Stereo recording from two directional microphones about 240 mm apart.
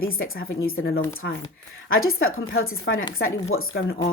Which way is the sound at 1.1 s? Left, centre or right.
Left.